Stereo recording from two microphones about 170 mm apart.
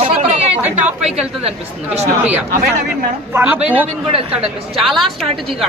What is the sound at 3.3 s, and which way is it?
Speech, 10° right (ahead or behind).